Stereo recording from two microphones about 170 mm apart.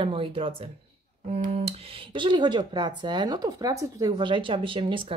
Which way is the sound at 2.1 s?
25° right (ahead or behind).